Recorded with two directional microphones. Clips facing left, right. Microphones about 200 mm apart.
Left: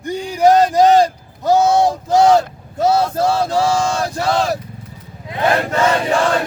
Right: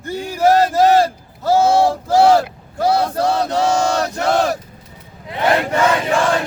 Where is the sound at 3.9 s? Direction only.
65° right (ahead or behind).